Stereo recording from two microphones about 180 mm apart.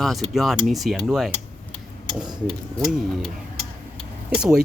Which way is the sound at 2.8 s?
Centre (ahead or behind).